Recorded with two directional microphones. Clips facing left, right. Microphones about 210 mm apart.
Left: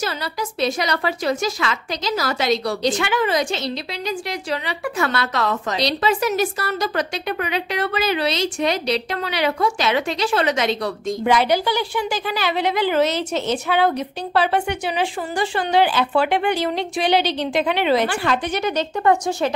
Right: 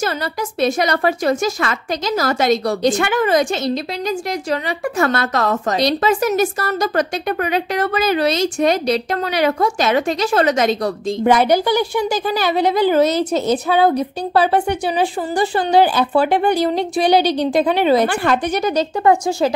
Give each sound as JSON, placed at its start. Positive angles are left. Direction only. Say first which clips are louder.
{"t": 0.6, "sound": "a woman's voice", "louder": "right 5 dB", "side_deg": -50}